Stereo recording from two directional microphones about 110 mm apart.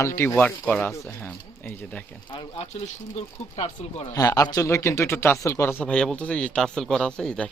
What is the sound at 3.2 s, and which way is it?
Speech, 70° left (ahead or behind).